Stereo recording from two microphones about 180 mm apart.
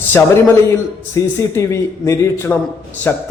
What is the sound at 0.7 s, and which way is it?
A man's voice, 15° left (ahead or behind).